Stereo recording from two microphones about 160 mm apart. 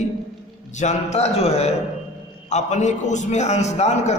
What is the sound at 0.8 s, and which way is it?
A man's voice, 45° left (ahead or behind).